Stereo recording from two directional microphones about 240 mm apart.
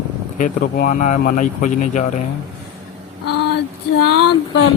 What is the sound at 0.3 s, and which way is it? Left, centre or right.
Speech, left.